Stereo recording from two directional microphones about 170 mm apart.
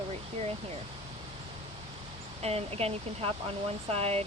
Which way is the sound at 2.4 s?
35° right (ahead or behind).